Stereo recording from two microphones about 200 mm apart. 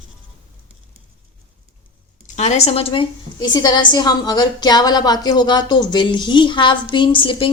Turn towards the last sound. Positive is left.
turn(degrees=25)  # may be behind; listen again after turning